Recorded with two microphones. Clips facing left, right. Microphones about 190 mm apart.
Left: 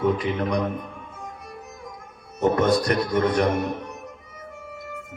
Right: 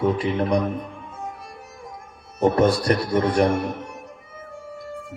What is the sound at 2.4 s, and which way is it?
Speech, 30° right (ahead or behind).